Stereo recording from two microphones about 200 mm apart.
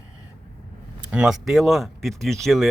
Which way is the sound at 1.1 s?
5° right (ahead or behind).